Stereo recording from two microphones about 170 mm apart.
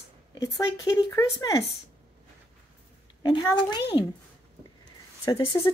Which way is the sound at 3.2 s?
25° left (ahead or behind).